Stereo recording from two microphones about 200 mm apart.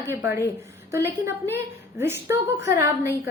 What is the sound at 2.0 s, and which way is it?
Speech, 10° right (ahead or behind).